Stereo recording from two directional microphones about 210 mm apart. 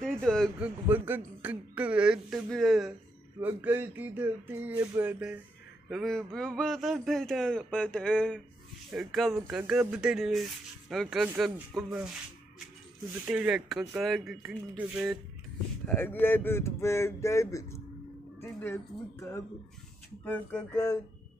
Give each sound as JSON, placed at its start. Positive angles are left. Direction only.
{"t": 0.0, "sound": "a man's voice", "side_deg": 5}
{"t": 0.8, "sound": "a man's voice", "side_deg": -10}
{"t": 13.2, "sound": "a man's voice", "side_deg": -5}
{"t": 15.9, "sound": "speech", "side_deg": 10}